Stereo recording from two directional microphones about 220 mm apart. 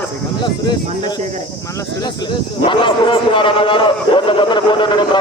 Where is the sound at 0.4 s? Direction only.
20° left (ahead or behind).